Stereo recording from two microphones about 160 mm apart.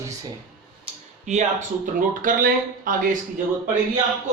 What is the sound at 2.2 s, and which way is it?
Speech, 60° right (ahead or behind).